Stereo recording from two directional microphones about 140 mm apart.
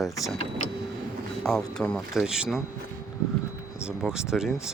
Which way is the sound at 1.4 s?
5° left (ahead or behind).